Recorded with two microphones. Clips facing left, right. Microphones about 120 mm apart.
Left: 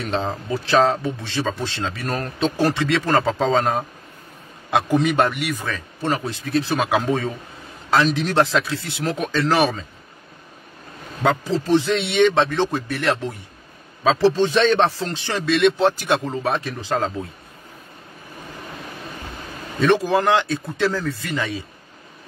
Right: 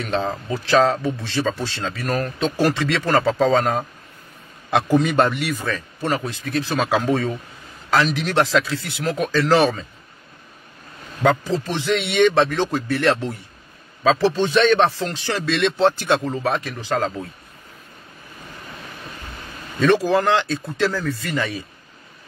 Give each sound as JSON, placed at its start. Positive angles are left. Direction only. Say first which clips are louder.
{"t": 0.0, "sound": "a man's voice", "louder": "right 1 dB", "side_deg": 25}
{"t": 11.2, "sound": "a man's voice", "louder": "even", "side_deg": 25}
{"t": 14.5, "sound": "speech", "louder": "right 1 dB", "side_deg": 30}
{"t": 15.3, "sound": "a man's voice", "louder": "left 4 dB", "side_deg": 15}
{"t": 19.9, "sound": "a man's voice", "louder": "even", "side_deg": 20}